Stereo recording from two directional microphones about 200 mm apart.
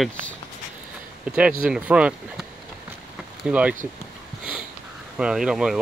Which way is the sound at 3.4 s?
5° right (ahead or behind).